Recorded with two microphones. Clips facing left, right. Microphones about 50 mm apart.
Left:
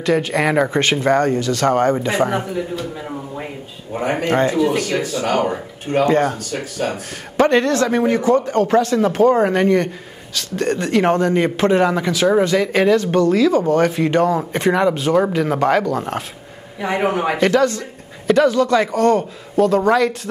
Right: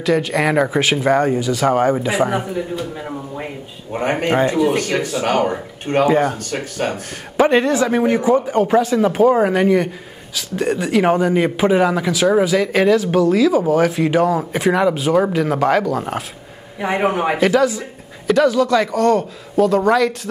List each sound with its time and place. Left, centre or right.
0.0 s a man's voice: centre
4.7 s speech: right
6.0 s speech: centre
6.5 s speech: right
7.3 s a man's voice: centre